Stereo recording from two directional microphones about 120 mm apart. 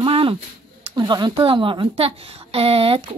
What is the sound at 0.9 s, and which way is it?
A woman's voice, 35° right (ahead or behind).